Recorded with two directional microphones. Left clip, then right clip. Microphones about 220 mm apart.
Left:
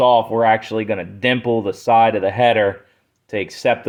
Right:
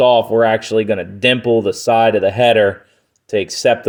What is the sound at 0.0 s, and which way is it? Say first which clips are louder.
Speech: right 2 dB; 60° right (ahead or behind).